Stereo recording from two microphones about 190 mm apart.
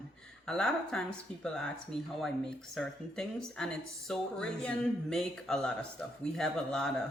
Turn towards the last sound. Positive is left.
turn(degrees=5)  # may be behind; listen again after turning